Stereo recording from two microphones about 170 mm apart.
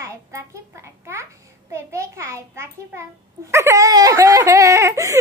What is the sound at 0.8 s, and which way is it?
Speech, 15° right (ahead or behind).